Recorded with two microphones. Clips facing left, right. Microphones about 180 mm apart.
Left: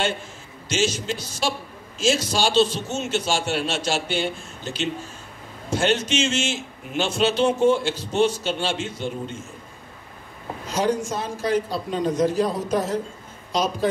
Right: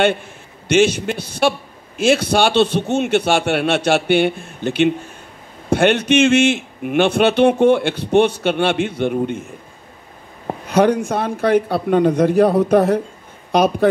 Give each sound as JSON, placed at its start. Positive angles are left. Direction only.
{"t": 0.7, "sound": "a man's voice", "side_deg": -60}
{"t": 10.4, "sound": "a man's voice", "side_deg": -60}